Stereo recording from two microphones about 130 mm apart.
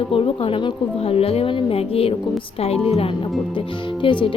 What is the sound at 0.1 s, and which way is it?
Speech, 45° left (ahead or behind).